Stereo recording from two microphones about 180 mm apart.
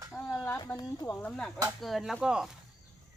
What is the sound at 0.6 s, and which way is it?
Speech, 20° left (ahead or behind).